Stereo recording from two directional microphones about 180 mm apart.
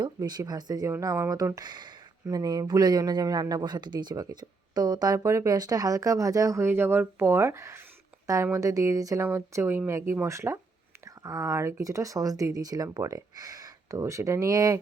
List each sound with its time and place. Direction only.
0.0 s speech: 25° right (ahead or behind)